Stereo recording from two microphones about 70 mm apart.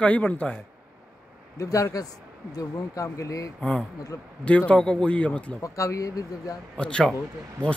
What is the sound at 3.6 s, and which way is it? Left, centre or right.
Speech, centre.